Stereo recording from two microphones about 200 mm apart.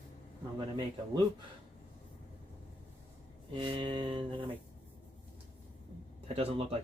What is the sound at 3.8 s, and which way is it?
Speech, 25° right (ahead or behind).